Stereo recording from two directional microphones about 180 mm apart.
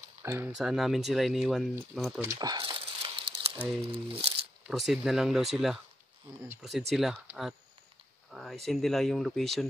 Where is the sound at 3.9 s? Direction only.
30° right (ahead or behind).